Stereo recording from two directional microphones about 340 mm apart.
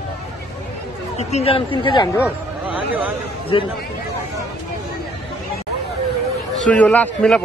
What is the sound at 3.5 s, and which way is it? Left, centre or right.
Speech, centre.